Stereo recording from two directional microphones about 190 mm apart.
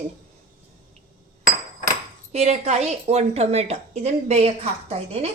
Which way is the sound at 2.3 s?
35° right (ahead or behind).